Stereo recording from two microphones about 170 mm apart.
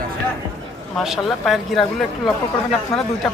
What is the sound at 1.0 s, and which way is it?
Speech, centre (ahead or behind).